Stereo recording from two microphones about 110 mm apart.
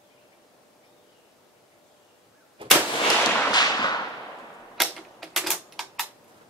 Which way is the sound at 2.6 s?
50° right (ahead or behind).